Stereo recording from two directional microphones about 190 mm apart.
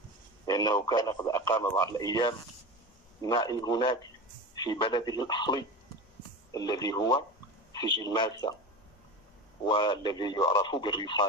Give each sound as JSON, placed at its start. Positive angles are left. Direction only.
{"t": 0.5, "sound": "speech", "side_deg": 20}
{"t": 9.7, "sound": "speech", "side_deg": 25}